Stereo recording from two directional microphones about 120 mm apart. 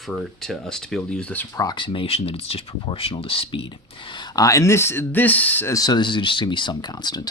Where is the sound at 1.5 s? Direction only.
35° left (ahead or behind); by 5.7 s 15° left (ahead or behind).